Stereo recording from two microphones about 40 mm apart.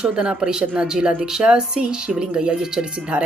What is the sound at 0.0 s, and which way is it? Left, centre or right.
Speech, right.